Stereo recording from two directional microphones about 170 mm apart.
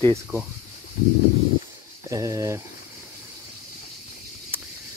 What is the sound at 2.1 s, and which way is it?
Speech, 20° right (ahead or behind).